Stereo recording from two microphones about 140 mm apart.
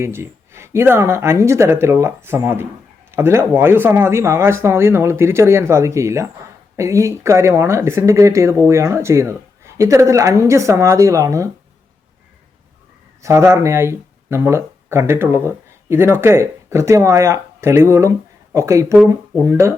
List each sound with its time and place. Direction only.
0.0 s speech: 20° right (ahead or behind)
13.2 s speech: 20° right (ahead or behind)